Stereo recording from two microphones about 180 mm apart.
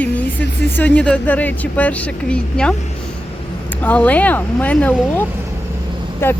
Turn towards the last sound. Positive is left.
turn(degrees=10)  # may be behind; listen again after turning